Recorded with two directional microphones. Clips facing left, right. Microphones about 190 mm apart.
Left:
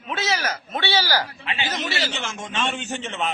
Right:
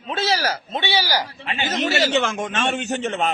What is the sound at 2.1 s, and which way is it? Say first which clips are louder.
Speech: right 10 dB; 60° right (ahead or behind).